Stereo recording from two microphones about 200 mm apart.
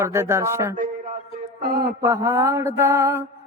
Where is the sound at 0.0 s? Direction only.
15° right (ahead or behind).